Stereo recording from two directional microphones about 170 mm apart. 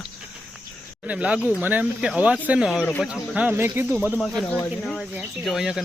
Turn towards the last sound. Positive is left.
turn(degrees=-5)  # may be behind; listen again after turning